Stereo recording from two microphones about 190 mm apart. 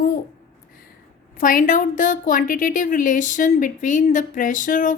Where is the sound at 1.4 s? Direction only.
45° left (ahead or behind).